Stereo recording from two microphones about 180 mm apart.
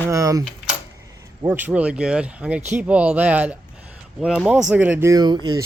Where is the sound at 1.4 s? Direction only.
10° right (ahead or behind).